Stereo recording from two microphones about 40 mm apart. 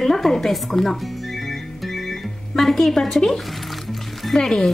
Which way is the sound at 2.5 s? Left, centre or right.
Centre.